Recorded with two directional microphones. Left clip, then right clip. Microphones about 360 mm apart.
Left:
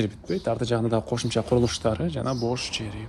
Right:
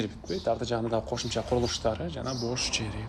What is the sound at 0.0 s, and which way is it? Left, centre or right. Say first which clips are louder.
Speech: left 3 dB; centre.